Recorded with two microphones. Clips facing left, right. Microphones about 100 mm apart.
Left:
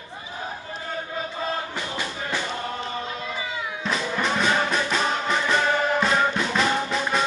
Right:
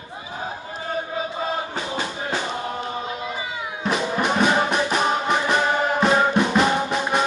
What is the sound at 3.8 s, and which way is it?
Music, 20° right (ahead or behind).